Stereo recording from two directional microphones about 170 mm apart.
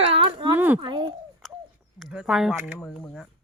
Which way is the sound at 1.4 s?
Centre (ahead or behind).